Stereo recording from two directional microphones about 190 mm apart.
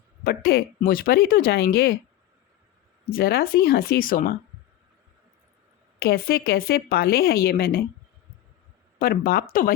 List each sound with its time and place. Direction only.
0.3 s speech: 50° left (ahead or behind)
3.1 s speech: 55° left (ahead or behind)
6.0 s speech: 55° left (ahead or behind)
9.0 s speech: 50° left (ahead or behind)